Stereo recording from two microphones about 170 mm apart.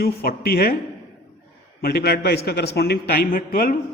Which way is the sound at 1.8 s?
65° left (ahead or behind).